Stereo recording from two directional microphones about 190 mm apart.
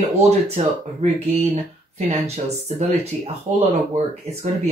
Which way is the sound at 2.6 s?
35° right (ahead or behind).